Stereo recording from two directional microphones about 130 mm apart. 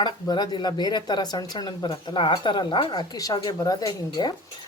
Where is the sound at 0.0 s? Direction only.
30° left (ahead or behind).